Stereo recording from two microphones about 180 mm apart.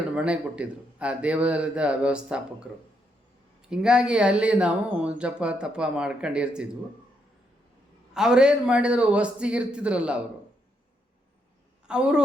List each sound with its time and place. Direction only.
0.1 s a man's voice: 5° right (ahead or behind)
3.7 s speech: 5° right (ahead or behind)
8.1 s speech: 5° right (ahead or behind)
11.9 s speech: 5° right (ahead or behind)